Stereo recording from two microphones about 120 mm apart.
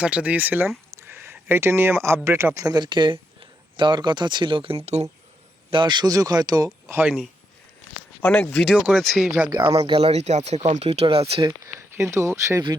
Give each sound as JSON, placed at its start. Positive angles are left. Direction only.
{"t": 0.0, "sound": "speech", "side_deg": -10}
{"t": 2.6, "sound": "speech", "side_deg": -35}
{"t": 5.7, "sound": "speech", "side_deg": -40}
{"t": 7.0, "sound": "speech", "side_deg": -5}
{"t": 8.2, "sound": "speech", "side_deg": 10}
{"t": 9.0, "sound": "speech", "side_deg": 0}
{"t": 9.5, "sound": "speech", "side_deg": -40}
{"t": 9.8, "sound": "speech", "side_deg": -55}
{"t": 11.6, "sound": "speech", "side_deg": -25}